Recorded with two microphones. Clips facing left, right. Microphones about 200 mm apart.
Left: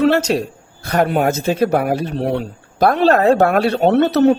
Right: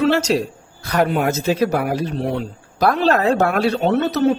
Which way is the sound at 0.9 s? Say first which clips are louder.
Left 2 dB; 50° left (ahead or behind).